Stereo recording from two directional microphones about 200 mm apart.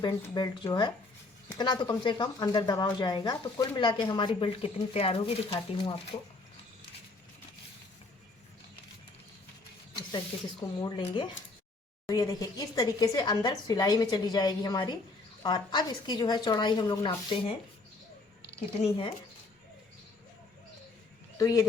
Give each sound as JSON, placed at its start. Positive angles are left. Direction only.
{"t": 0.0, "sound": "speech", "side_deg": 20}
{"t": 10.6, "sound": "speech", "side_deg": 20}
{"t": 18.8, "sound": "speech", "side_deg": 25}
{"t": 21.3, "sound": "speech", "side_deg": 15}